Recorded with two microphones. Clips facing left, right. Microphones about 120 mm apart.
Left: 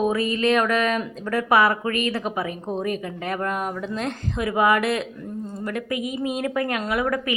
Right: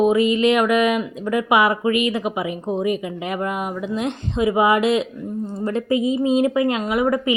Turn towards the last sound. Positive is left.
turn(degrees=-20)  # may be behind; listen again after turning